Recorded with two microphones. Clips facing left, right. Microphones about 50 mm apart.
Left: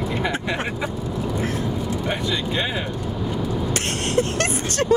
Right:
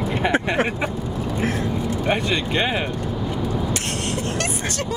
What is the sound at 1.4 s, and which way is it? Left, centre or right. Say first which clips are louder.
Vehicle: right 4 dB; right.